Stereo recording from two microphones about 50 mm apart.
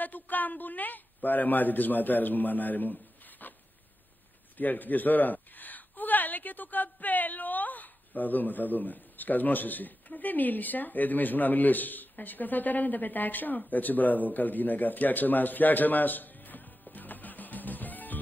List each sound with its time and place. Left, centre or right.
0.0 s speech: left
4.6 s a woman's voice: left
16.9 s music: left